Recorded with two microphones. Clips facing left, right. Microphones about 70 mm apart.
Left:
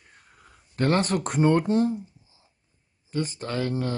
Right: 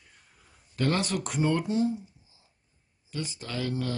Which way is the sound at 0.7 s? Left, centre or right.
Left.